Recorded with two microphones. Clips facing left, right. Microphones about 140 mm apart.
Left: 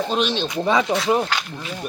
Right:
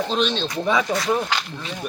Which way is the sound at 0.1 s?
10° left (ahead or behind).